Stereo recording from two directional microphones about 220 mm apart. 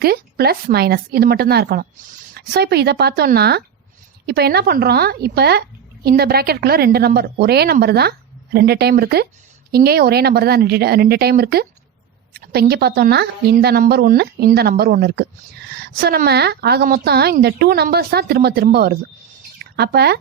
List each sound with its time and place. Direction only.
0.0 s a woman's voice: 45° right (ahead or behind)